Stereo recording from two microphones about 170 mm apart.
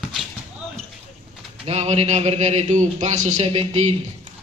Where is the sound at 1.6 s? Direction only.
40° right (ahead or behind).